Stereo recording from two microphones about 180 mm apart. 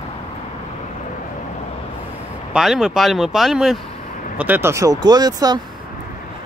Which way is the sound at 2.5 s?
Centre (ahead or behind).